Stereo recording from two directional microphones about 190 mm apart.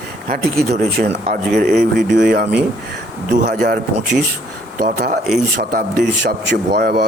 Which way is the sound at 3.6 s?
40° right (ahead or behind).